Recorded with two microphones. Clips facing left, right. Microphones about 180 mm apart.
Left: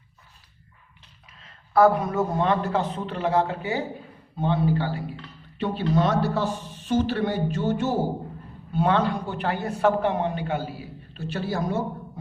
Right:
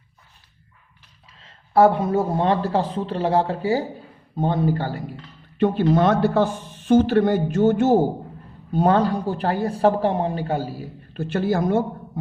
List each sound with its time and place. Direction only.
1.3 s speech: 30° right (ahead or behind); by 7.9 s 50° right (ahead or behind)
8.7 s speech: 40° right (ahead or behind)
11.1 s speech: 50° right (ahead or behind)